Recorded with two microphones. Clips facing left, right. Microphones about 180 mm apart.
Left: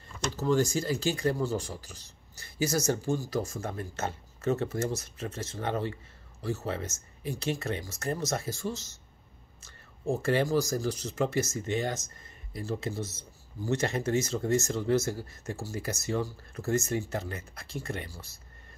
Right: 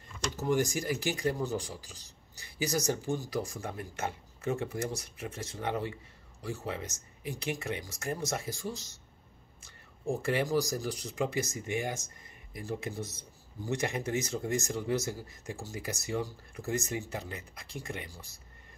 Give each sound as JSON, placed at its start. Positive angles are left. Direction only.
{"t": 0.4, "sound": "speech", "side_deg": -15}
{"t": 10.1, "sound": "speech", "side_deg": -15}